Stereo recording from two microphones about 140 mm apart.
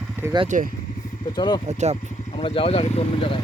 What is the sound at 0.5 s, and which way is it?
Speech, 65° right (ahead or behind).